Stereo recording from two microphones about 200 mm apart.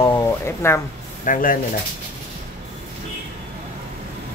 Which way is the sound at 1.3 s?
40° left (ahead or behind).